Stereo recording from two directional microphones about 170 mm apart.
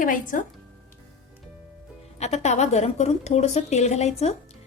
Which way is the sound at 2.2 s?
40° left (ahead or behind).